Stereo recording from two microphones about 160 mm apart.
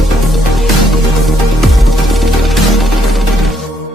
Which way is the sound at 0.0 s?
Centre (ahead or behind).